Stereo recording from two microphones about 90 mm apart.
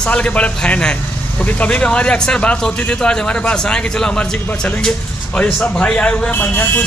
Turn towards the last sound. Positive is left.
turn(degrees=20)  # may be behind; listen again after turning